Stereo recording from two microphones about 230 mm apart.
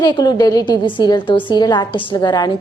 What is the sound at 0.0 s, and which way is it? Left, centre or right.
A woman's voice, centre.